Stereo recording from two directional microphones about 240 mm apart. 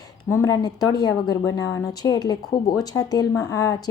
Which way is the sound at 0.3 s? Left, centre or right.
Centre.